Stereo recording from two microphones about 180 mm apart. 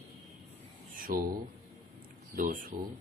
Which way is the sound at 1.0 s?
50° right (ahead or behind).